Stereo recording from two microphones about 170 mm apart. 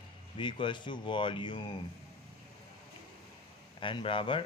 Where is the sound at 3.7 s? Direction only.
30° left (ahead or behind).